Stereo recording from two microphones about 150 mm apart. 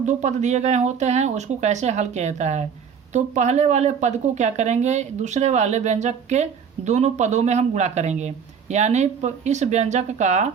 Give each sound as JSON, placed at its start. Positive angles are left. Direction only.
{"t": 0.0, "sound": "speech", "side_deg": -50}